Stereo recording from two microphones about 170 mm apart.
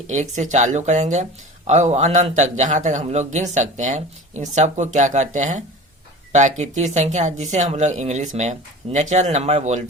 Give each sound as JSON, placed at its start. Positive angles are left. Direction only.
{"t": 0.1, "sound": "speech", "side_deg": -45}